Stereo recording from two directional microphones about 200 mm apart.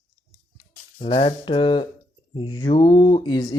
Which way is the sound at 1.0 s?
25° left (ahead or behind).